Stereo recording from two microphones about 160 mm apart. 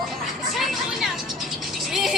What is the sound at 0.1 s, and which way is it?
Vehicle, centre (ahead or behind).